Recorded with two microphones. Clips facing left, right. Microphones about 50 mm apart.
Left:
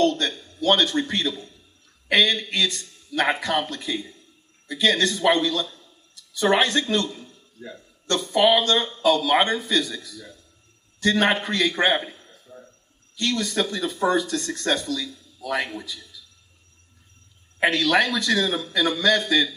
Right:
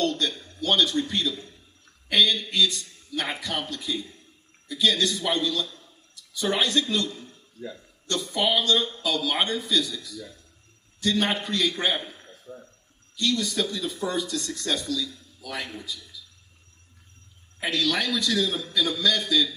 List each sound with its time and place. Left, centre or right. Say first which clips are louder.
0.0 s a sound: left 5 dB; left
0.6 s speech: left 3 dB; left
13.1 s speech: left 2 dB; left
17.6 s speech: left 6 dB; left